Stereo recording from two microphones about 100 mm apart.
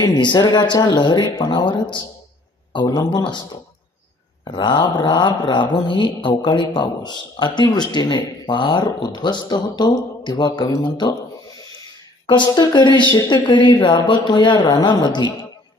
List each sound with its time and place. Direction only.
0.0 s speech: 50° left (ahead or behind)
2.7 s speech: 40° left (ahead or behind)
4.4 s speech: 50° left (ahead or behind)
12.2 s speech: 50° left (ahead or behind)